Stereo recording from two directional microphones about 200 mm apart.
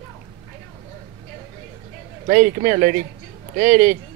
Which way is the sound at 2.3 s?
40° right (ahead or behind).